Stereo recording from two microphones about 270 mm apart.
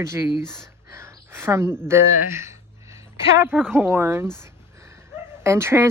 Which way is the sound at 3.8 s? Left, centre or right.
Centre.